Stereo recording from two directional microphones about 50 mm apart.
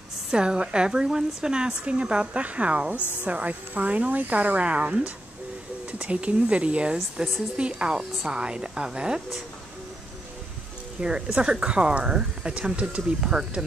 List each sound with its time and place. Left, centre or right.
0.3 s a woman's voice: centre
11.0 s speech: centre